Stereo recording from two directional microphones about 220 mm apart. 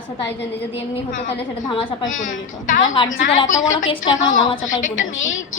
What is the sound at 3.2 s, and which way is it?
A woman's voice, 35° left (ahead or behind).